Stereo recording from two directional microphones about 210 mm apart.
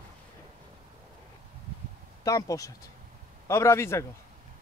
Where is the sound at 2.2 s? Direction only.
15° left (ahead or behind).